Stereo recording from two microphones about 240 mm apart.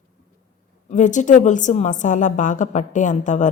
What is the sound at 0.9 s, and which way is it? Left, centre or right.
A woman's voice, left.